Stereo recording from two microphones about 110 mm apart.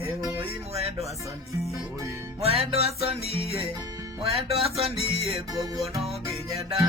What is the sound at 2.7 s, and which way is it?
Music, 70° right (ahead or behind).